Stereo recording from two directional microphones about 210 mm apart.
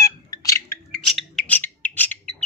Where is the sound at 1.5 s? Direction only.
10° left (ahead or behind).